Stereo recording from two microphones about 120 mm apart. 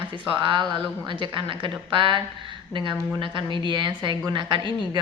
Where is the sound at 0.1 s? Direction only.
40° right (ahead or behind).